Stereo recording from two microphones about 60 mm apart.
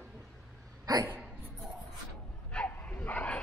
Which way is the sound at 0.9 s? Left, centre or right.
Right.